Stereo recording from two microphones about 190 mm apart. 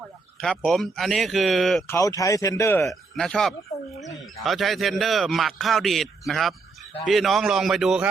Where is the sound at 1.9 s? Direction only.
15° left (ahead or behind).